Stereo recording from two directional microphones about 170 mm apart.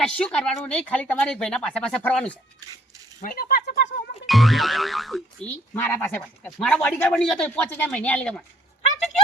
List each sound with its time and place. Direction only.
0.0 s speech: 5° left (ahead or behind)
3.2 s speech: 55° left (ahead or behind)
4.3 s speech: centre (ahead or behind)